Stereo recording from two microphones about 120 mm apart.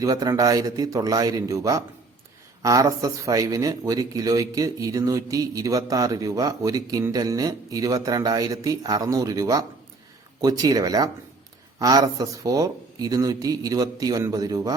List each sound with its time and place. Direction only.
0.0 s speech: 30° right (ahead or behind)